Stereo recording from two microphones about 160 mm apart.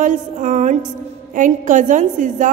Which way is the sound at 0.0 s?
50° right (ahead or behind).